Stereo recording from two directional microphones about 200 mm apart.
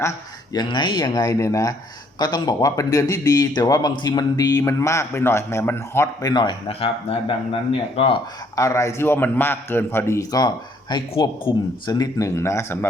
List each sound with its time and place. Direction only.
0.5 s a man's voice: 20° left (ahead or behind)
8.5 s a man's voice: 15° left (ahead or behind)